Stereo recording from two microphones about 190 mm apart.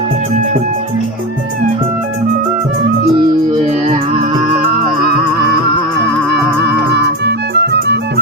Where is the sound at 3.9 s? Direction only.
40° right (ahead or behind).